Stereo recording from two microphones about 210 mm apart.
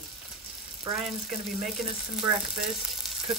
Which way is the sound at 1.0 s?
Centre (ahead or behind).